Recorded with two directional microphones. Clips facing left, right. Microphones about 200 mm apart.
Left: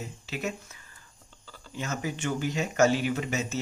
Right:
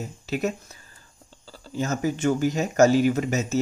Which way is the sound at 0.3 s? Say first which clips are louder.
Right 8 dB; 40° right (ahead or behind).